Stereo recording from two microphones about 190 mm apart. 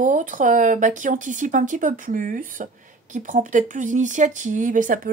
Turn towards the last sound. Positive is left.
turn(degrees=-45)  # may be behind; listen again after turning